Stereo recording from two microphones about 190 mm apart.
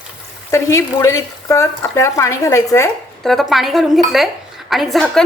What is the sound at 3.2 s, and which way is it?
A woman's voice, centre (ahead or behind).